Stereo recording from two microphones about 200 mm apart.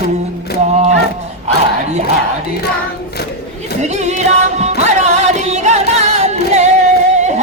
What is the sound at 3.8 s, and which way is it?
Music, 35° right (ahead or behind).